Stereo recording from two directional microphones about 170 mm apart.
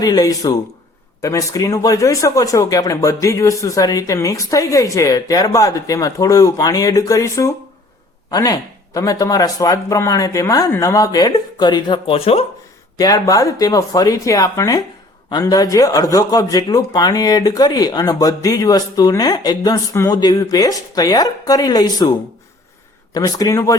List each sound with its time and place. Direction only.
0.0 s speech: 20° left (ahead or behind)
13.0 s speech: 20° left (ahead or behind)
23.1 s speech: 20° left (ahead or behind)